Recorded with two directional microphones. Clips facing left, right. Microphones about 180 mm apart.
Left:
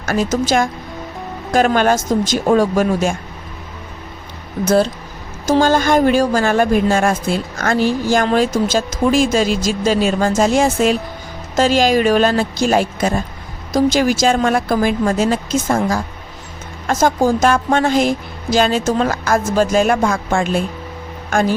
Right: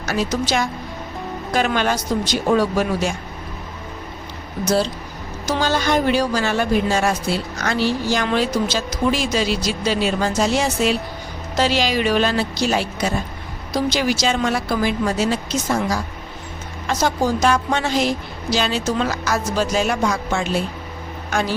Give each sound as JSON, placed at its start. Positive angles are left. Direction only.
{"t": 0.0, "sound": "a woman's voice", "side_deg": 50}
{"t": 4.6, "sound": "a woman's voice", "side_deg": 55}